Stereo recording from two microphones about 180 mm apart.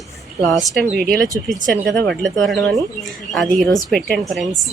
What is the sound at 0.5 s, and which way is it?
A woman's voice, centre (ahead or behind).